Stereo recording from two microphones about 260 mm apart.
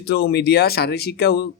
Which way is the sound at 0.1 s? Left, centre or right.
Left.